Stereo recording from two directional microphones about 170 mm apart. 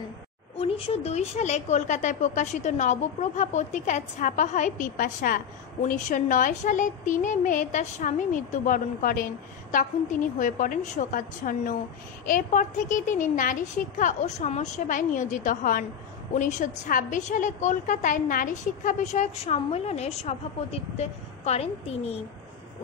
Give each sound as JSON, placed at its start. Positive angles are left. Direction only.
{"t": 0.6, "sound": "a child's voice", "side_deg": 35}